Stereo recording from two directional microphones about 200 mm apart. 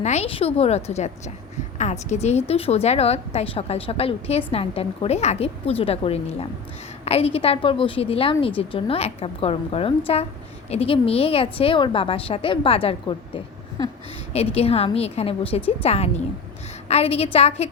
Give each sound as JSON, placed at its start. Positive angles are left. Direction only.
{"t": 0.0, "sound": "a woman's voice", "side_deg": 35}